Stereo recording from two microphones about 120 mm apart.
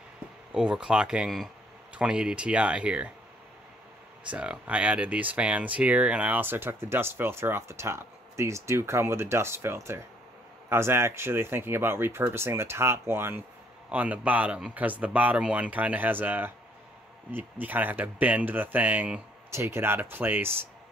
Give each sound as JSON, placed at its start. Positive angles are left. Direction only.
{"t": 0.5, "sound": "a man's voice", "side_deg": -5}
{"t": 4.3, "sound": "a man's voice", "side_deg": -10}